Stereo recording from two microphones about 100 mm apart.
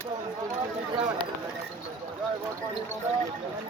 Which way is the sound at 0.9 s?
50° right (ahead or behind).